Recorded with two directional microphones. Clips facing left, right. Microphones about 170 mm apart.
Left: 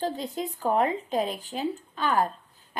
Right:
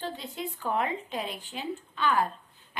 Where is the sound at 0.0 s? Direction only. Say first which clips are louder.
Left 6 dB; 40° left (ahead or behind).